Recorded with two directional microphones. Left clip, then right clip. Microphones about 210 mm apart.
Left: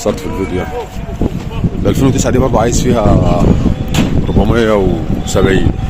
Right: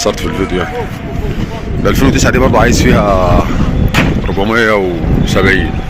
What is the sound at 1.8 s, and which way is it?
Speech, centre (ahead or behind).